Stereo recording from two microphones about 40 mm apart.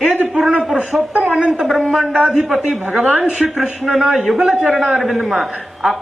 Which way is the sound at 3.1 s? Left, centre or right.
Right.